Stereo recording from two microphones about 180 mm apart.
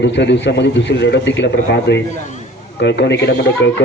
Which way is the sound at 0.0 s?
75° left (ahead or behind).